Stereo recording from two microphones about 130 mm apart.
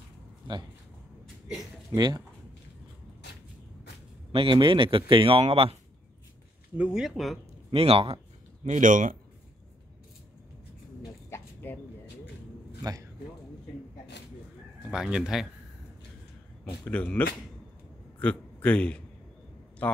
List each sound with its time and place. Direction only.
2.0 s speech: 35° right (ahead or behind)
4.3 s speech: 40° right (ahead or behind)
6.8 s speech: 5° right (ahead or behind)
7.7 s speech: 50° right (ahead or behind)
8.6 s speech: 80° right
11.2 s a sound: 15° left (ahead or behind)
12.8 s speech: 35° right (ahead or behind)
14.9 s speech: 5° right (ahead or behind)
16.8 s speech: 10° left (ahead or behind)
18.2 s a man's voice: 10° left (ahead or behind)